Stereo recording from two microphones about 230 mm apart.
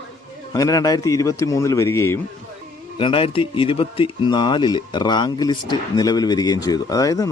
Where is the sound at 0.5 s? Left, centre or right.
Centre.